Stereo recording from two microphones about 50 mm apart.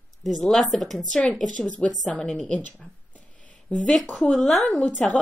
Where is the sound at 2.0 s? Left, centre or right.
Centre.